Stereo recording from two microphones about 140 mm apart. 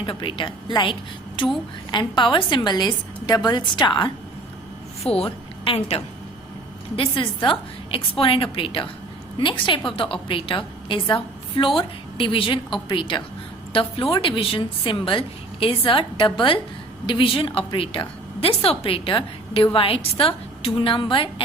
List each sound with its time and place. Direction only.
0.0 s a woman's voice: 35° left (ahead or behind)
5.1 s a woman's voice: 45° left (ahead or behind)